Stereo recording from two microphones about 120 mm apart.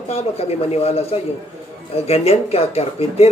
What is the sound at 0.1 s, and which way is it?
Speech, 55° left (ahead or behind).